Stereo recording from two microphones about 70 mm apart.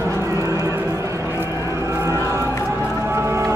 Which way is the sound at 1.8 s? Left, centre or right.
Right.